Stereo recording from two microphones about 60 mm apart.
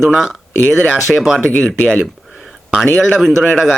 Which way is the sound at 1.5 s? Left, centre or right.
Centre.